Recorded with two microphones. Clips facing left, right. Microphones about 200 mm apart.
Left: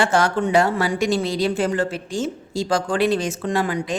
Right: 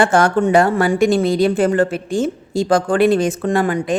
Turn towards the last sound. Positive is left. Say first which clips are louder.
# right 5 dB
turn(degrees=-50)  # may be behind; listen again after turning